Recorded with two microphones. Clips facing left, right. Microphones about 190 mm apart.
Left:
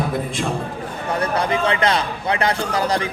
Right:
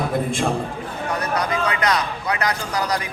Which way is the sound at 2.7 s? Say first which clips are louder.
Left 3 dB; 25° left (ahead or behind).